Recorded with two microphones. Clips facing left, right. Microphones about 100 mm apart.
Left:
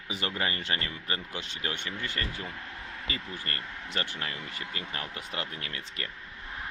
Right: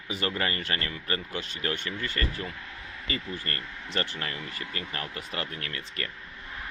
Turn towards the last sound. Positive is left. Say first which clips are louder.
# right 2 dB
turn(degrees=15)  # may be behind; listen again after turning